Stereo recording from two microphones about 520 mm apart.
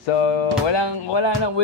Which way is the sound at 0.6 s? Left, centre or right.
Left.